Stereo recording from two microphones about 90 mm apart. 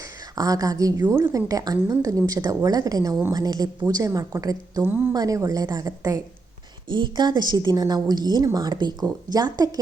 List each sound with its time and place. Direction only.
0.3 s a woman's voice: 40° right (ahead or behind)
4.8 s speech: 25° right (ahead or behind)
5.1 s a woman's voice: 40° right (ahead or behind)
6.9 s a woman's voice: 55° right (ahead or behind)